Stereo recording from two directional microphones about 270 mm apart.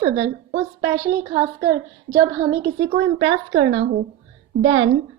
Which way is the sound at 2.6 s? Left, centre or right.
Right.